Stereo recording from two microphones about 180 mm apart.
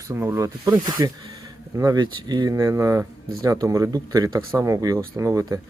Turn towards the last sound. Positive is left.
turn(degrees=-15)  # may be behind; listen again after turning